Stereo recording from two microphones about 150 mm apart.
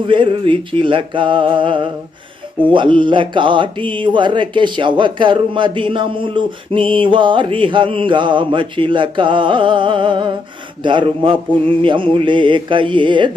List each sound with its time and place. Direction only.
0.0 s speech: 35° right (ahead or behind)